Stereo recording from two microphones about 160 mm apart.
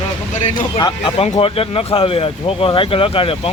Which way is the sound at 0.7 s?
25° left (ahead or behind).